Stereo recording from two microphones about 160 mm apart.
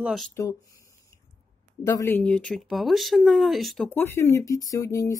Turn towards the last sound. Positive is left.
turn(degrees=20)  # may be behind; listen again after turning